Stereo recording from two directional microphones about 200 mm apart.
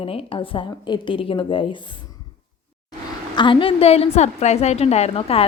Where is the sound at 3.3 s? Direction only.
25° left (ahead or behind).